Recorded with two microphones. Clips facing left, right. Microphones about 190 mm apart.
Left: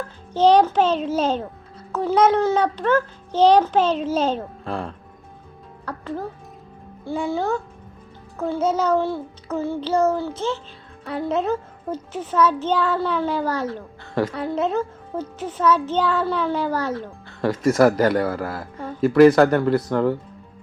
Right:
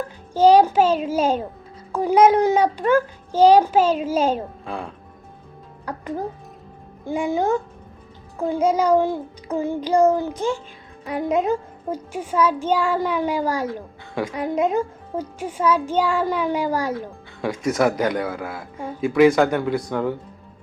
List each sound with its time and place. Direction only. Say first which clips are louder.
0.3 s a child's voice: right 2 dB; 10° right (ahead or behind)
5.8 s a child's voice: right 2 dB; 15° right (ahead or behind)
14.3 s a child's voice: right 2 dB; 10° right (ahead or behind)
17.4 s a man's voice: left 4 dB; centre (ahead or behind)